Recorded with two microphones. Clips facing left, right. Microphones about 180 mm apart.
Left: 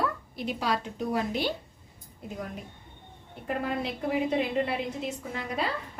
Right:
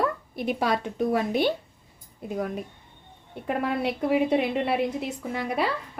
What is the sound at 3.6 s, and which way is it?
A woman's voice, 70° right (ahead or behind).